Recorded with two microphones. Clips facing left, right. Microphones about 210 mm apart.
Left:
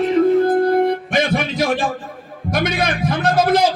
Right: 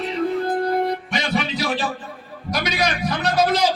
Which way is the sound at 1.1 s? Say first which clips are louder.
Left 5 dB; 50° left (ahead or behind).